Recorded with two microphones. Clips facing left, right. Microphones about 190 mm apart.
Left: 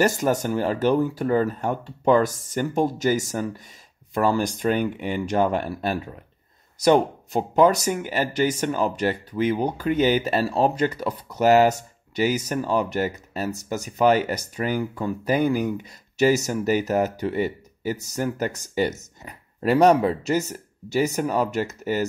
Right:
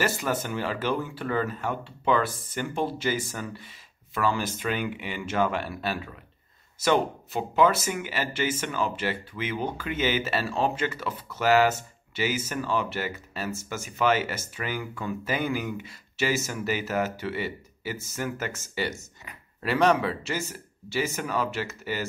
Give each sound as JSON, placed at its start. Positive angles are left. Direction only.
{"t": 0.0, "sound": "speech", "side_deg": 45}